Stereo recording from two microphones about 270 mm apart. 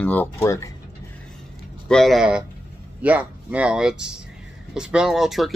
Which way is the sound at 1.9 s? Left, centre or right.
Centre.